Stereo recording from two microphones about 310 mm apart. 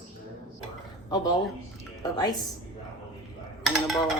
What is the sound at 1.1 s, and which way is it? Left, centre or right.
Speech, centre.